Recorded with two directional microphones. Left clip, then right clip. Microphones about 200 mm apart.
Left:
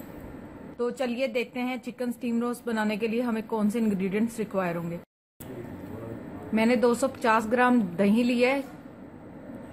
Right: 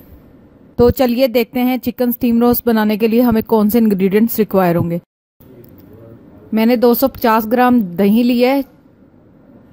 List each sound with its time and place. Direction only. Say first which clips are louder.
0.7 s speech: right 17 dB; 45° right (ahead or behind)
6.5 s speech: right 11 dB; 45° right (ahead or behind)